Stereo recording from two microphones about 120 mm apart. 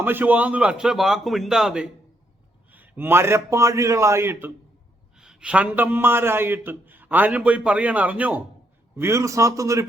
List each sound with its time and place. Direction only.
0.0 s a man's voice: 15° right (ahead or behind)
5.1 s a man's voice: 5° right (ahead or behind)
9.0 s a man's voice: 25° right (ahead or behind)